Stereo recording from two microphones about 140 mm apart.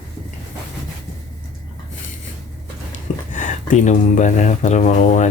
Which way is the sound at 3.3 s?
60° left (ahead or behind).